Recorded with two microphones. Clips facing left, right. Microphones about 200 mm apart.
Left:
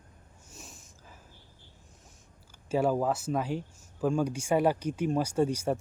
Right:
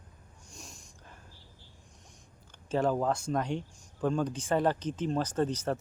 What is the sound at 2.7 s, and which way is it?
Speech, 10° left (ahead or behind).